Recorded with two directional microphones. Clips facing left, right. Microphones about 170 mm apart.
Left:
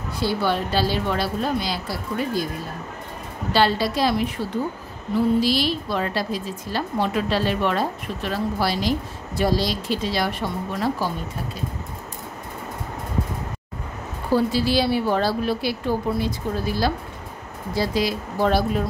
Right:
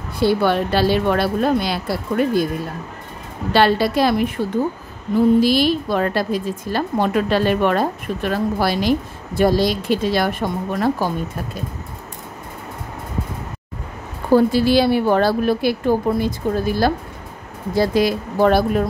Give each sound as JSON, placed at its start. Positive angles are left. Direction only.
{"t": 0.2, "sound": "speech", "side_deg": -60}
{"t": 3.5, "sound": "speech", "side_deg": -60}
{"t": 5.4, "sound": "a woman's voice", "side_deg": -50}
{"t": 14.3, "sound": "a woman's voice", "side_deg": -55}